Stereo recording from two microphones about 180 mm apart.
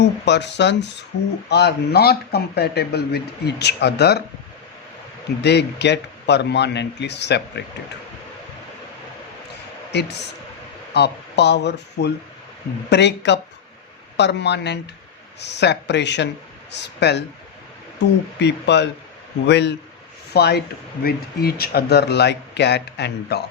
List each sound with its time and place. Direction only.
0.3 s speech: 75° left (ahead or behind)
5.4 s speech: 70° left (ahead or behind)
9.9 s speech: 70° left (ahead or behind)